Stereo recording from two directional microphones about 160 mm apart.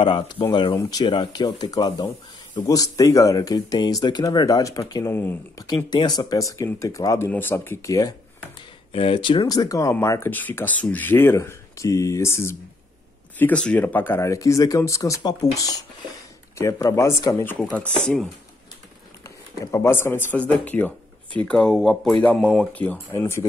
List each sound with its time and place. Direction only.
0.0 s speech: 30° left (ahead or behind); by 5.7 s 15° left (ahead or behind)
5.9 s speech: 25° left (ahead or behind)
8.9 s speech: 35° left (ahead or behind); by 18.3 s 5° left (ahead or behind)
19.2 s speech: 15° left (ahead or behind)